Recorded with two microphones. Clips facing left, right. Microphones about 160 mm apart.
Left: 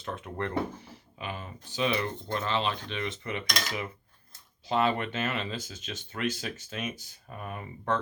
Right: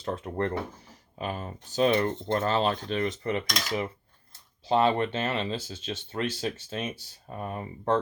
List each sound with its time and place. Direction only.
0.0 s speech: 35° right (ahead or behind)